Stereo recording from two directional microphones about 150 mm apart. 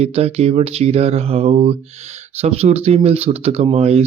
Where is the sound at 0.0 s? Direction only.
45° right (ahead or behind).